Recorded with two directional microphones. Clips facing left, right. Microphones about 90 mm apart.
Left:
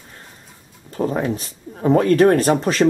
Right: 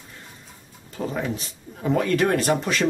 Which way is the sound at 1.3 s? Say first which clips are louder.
Left 5 dB; 40° left (ahead or behind).